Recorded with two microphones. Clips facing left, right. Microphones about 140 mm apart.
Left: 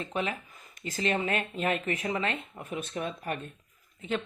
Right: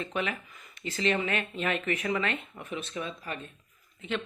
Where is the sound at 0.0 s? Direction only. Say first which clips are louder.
Even; 35° left (ahead or behind).